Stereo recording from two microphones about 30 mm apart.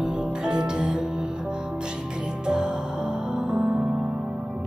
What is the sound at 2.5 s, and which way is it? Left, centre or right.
Music, right.